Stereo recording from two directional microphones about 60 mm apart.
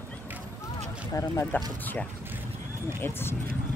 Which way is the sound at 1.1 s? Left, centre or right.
Left.